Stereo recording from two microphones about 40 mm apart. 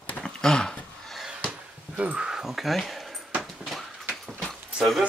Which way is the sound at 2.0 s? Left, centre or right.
Right.